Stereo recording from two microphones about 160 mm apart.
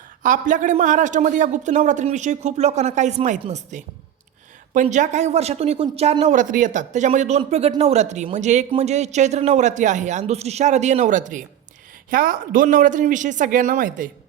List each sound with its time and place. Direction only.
0.2 s a man's voice: 55° right (ahead or behind)